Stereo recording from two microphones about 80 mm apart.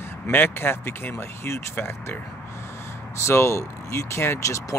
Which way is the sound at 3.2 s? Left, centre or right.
Left.